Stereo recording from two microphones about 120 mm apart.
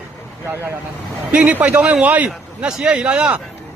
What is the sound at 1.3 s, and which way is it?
A man's voice, 10° right (ahead or behind).